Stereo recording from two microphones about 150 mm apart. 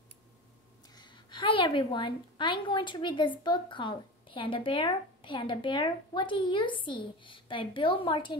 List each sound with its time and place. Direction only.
0.9 s a woman's voice: 30° left (ahead or behind)